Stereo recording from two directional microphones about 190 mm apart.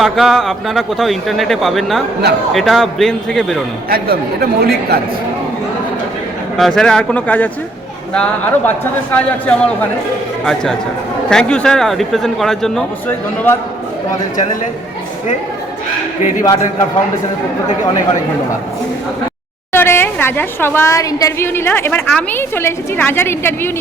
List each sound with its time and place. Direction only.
0.0 s a man's voice: centre (ahead or behind)
3.8 s speech: 55° right (ahead or behind)
6.6 s a man's voice: centre (ahead or behind)
19.7 s a woman's voice: 10° left (ahead or behind)